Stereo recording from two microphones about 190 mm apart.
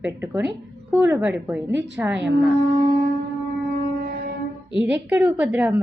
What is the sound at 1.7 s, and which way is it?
Speech, 70° right (ahead or behind).